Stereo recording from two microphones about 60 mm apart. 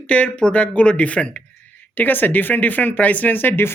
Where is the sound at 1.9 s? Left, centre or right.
Left.